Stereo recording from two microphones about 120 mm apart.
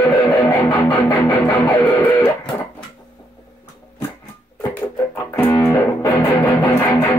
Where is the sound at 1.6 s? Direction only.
15° left (ahead or behind).